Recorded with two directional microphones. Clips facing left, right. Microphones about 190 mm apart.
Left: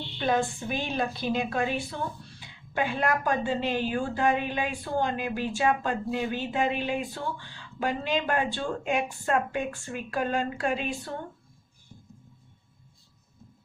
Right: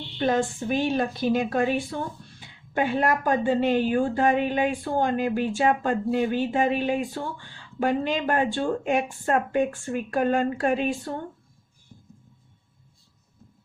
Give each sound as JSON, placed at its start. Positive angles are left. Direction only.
{"t": 0.2, "sound": "a woman's voice", "side_deg": -45}